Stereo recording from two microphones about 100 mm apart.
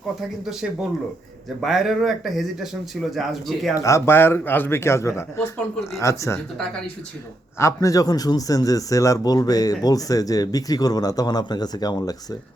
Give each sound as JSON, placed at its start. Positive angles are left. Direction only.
{"t": 1.6, "sound": "speech", "side_deg": 0}
{"t": 3.8, "sound": "a man's voice", "side_deg": 30}
{"t": 7.6, "sound": "speech", "side_deg": 35}